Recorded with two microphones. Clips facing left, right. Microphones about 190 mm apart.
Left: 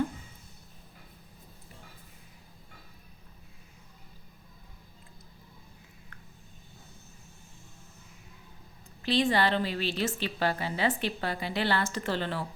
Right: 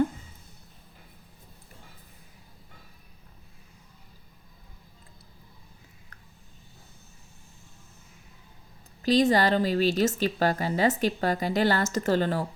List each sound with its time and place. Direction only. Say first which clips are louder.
9.0 s a woman's voice: right 5 dB; 40° right (ahead or behind)